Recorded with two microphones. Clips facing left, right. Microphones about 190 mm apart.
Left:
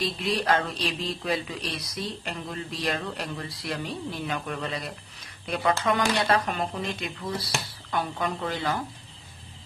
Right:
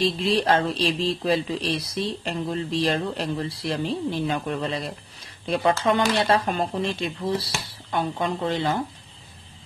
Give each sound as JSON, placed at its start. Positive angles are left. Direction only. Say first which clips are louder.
{"t": 0.0, "sound": "speech", "louder": "right 5 dB", "side_deg": -30}